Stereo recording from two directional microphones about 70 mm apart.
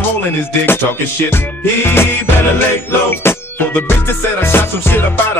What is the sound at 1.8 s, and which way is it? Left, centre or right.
Music, left.